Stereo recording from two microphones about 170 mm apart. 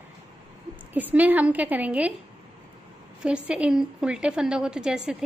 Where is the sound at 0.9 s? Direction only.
10° right (ahead or behind).